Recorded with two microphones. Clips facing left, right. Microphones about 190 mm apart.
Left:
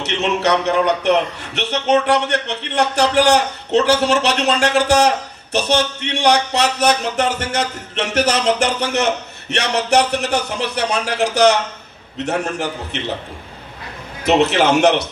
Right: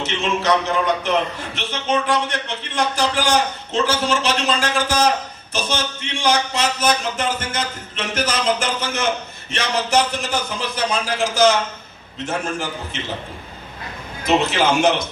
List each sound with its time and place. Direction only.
0.0 s a man's voice: 70° left (ahead or behind)
14.2 s a man's voice: 70° left (ahead or behind)